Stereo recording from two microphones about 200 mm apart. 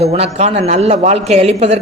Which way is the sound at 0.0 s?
30° right (ahead or behind).